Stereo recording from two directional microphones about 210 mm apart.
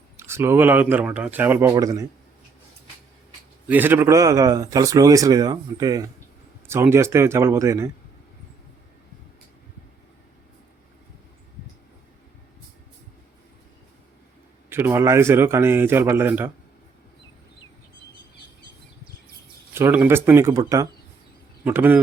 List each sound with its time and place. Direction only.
0.2 s a man's voice: 10° right (ahead or behind)
3.7 s a man's voice: 10° right (ahead or behind)
14.7 s a man's voice: 10° right (ahead or behind)
19.7 s a man's voice: 10° right (ahead or behind)